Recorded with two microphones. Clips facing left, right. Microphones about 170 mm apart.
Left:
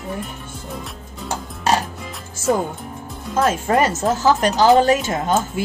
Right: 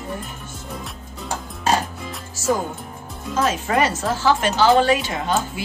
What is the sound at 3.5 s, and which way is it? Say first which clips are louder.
Speech: left 2 dB; 45° left (ahead or behind).